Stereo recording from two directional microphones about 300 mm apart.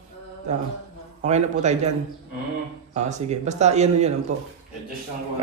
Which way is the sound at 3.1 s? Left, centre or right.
Right.